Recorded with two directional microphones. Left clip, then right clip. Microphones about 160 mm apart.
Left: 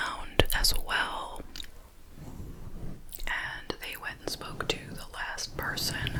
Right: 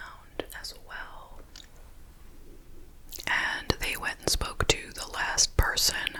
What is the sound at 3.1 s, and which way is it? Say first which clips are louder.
Whispering: right 6 dB; 25° right (ahead or behind).